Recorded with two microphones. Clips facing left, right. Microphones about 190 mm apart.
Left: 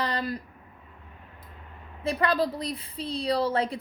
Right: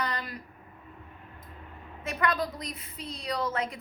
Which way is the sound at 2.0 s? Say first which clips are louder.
Left 4 dB; 30° left (ahead or behind).